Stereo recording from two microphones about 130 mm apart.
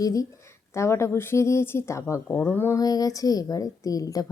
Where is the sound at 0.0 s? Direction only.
25° left (ahead or behind).